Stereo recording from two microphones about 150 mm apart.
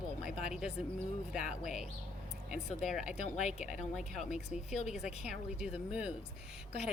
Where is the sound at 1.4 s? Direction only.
55° left (ahead or behind).